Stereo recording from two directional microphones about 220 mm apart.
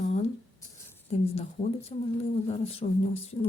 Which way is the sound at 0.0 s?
30° left (ahead or behind).